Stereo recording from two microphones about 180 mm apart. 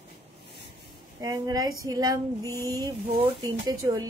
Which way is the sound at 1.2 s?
20° right (ahead or behind).